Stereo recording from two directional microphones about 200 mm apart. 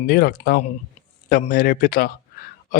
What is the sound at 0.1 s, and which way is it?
Speech, 50° left (ahead or behind).